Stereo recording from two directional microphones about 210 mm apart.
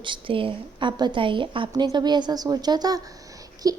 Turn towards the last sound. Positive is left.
turn(degrees=-15)  # may be behind; listen again after turning